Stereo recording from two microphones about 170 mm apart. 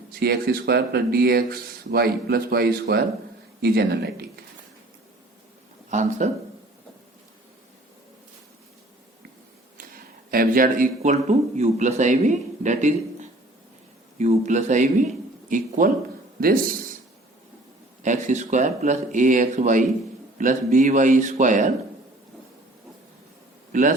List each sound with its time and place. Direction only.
0.1 s speech: 60° right (ahead or behind)
5.9 s speech: 45° right (ahead or behind)
9.7 s speech: 60° right (ahead or behind)
18.0 s speech: 45° right (ahead or behind)
23.7 s speech: 50° right (ahead or behind)